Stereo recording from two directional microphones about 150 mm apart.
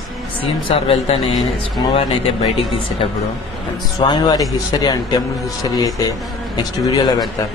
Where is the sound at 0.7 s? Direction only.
40° left (ahead or behind).